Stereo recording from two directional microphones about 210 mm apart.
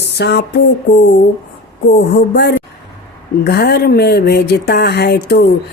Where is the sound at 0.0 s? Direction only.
55° left (ahead or behind).